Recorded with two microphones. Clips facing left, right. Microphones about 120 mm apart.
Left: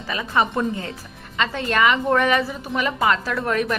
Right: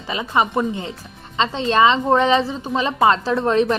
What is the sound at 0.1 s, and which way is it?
A woman's voice, 20° right (ahead or behind).